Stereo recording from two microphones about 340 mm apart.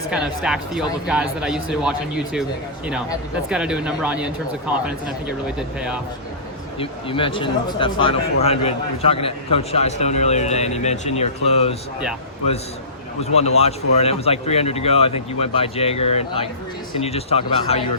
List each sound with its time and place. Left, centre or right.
0.1 s speech: centre
3.5 s speech: centre
6.7 s speech: centre
13.2 s speech: centre